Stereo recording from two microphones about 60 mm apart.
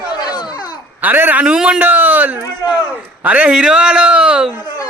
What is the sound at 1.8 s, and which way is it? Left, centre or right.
Speech, right.